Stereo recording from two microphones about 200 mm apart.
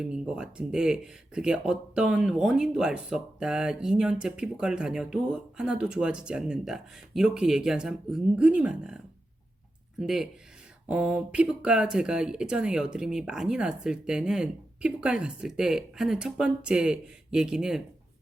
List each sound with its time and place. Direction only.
0.0 s speech: 5° right (ahead or behind)
10.0 s speech: centre (ahead or behind)